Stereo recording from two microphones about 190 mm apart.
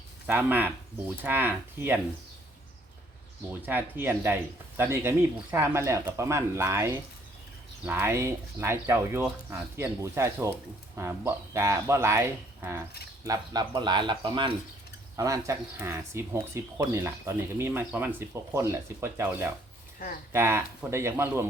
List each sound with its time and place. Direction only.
0.3 s speech: 10° right (ahead or behind)
3.5 s speech: 10° right (ahead or behind)